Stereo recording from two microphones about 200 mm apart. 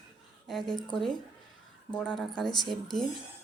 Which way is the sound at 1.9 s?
5° left (ahead or behind).